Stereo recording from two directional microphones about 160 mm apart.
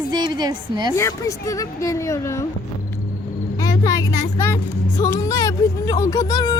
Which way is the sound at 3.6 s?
20° left (ahead or behind).